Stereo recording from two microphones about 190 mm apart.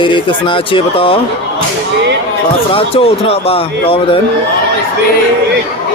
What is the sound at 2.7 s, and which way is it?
Speech, 30° left (ahead or behind).